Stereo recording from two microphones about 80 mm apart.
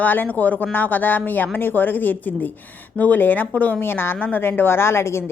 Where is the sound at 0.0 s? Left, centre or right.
Left.